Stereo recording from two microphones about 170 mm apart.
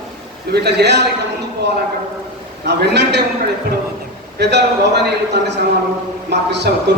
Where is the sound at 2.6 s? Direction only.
85° right.